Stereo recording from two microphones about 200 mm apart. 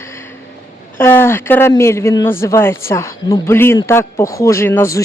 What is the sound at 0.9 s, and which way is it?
Speech, 10° left (ahead or behind).